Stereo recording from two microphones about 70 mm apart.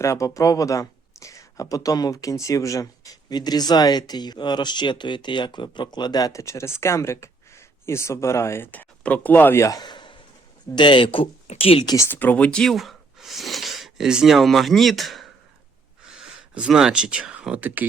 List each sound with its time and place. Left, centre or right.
0.0 s speech: left
6.4 s speech: left
8.7 s speech: left
9.6 s speech: left
9.8 s a sound: left
11.9 s speech: left
12.2 s speech: left
12.5 s speech: centre
12.7 s a sound: centre
14.1 s speech: centre
16.0 s speech: centre